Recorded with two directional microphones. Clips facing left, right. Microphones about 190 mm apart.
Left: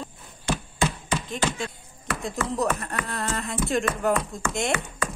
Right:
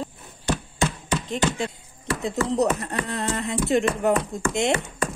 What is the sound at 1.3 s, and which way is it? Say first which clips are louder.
Speech: right 6 dB; 20° right (ahead or behind).